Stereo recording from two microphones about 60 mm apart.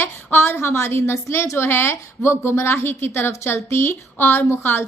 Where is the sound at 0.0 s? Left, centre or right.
Left.